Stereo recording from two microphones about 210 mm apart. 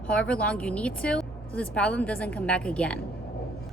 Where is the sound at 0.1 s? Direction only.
5° left (ahead or behind).